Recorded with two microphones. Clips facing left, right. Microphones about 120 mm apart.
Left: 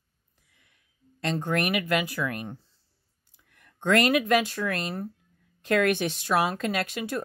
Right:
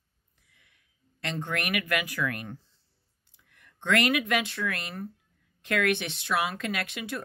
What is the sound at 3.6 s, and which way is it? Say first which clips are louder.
Speech: left 3 dB; 40° left (ahead or behind).